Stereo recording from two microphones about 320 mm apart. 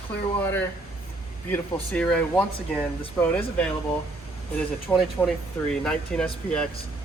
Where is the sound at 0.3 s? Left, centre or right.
Centre.